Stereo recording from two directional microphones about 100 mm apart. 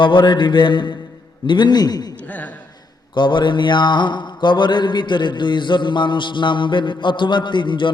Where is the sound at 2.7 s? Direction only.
50° left (ahead or behind).